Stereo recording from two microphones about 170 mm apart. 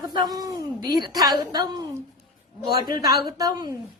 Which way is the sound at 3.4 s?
20° right (ahead or behind).